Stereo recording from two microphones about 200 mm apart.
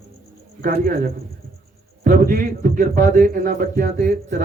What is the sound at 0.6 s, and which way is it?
Speech, 45° right (ahead or behind).